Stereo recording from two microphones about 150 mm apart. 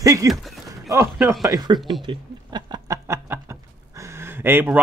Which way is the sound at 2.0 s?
30° right (ahead or behind).